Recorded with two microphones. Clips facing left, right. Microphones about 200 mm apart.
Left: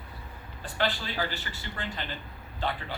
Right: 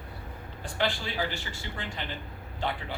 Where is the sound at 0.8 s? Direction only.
15° right (ahead or behind).